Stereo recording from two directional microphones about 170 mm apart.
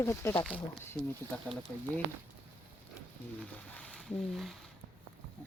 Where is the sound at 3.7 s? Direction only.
5° left (ahead or behind).